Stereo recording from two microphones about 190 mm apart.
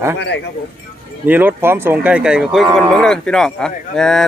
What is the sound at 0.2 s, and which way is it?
Speech, 65° left (ahead or behind).